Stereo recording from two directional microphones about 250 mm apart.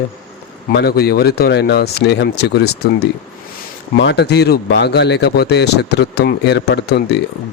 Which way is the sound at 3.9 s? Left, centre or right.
Left.